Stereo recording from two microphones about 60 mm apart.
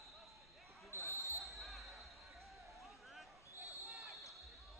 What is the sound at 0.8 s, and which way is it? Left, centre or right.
Basketball bounce, left.